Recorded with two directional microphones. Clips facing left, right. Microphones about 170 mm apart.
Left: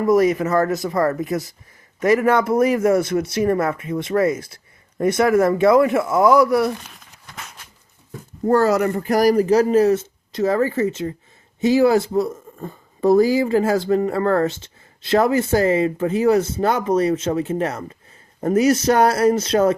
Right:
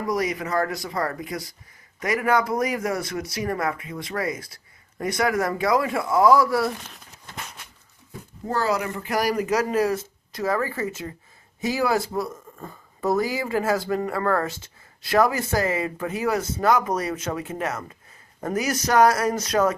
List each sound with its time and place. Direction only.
1.2 s speech: 25° left (ahead or behind)
8.4 s speech: 50° left (ahead or behind); by 19.7 s 30° left (ahead or behind)